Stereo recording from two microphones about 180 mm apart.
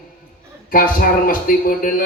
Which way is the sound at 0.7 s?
50° left (ahead or behind).